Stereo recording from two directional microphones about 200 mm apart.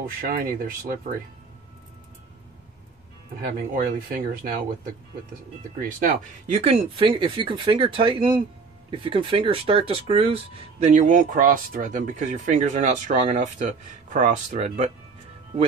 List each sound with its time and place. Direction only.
0.0 s speech: 45° right (ahead or behind)
3.7 s speech: 45° right (ahead or behind)
5.8 s speech: 45° right (ahead or behind)